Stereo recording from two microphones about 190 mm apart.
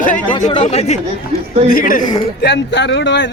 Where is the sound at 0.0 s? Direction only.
40° left (ahead or behind).